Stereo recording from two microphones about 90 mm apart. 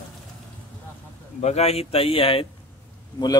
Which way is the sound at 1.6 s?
90° left.